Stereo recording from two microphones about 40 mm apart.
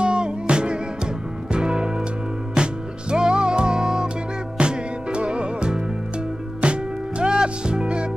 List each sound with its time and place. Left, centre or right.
0.0 s music: right